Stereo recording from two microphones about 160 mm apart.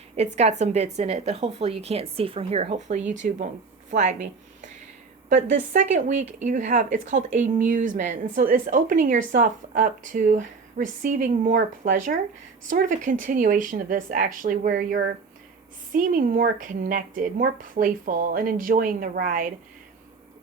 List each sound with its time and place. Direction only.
0.3 s a woman's voice: 45° right (ahead or behind); by 15.1 s 80° right
15.9 s speech: 60° right (ahead or behind)